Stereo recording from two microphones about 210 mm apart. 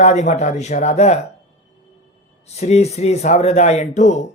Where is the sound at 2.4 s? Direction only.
30° left (ahead or behind).